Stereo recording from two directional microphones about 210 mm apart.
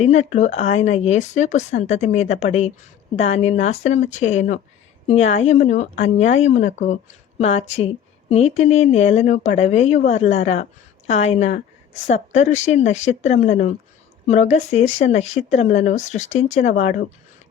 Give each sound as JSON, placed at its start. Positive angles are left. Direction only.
{"t": 0.0, "sound": "speech", "side_deg": 30}